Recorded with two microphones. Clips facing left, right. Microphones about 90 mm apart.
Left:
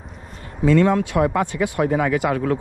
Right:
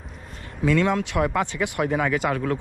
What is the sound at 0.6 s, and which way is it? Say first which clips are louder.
Speech: left 5 dB; 25° left (ahead or behind).